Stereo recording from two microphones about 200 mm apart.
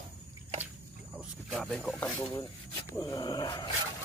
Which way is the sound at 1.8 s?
5° left (ahead or behind).